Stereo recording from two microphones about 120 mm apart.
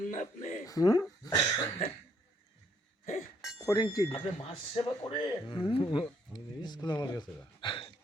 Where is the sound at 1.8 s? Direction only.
75° left (ahead or behind).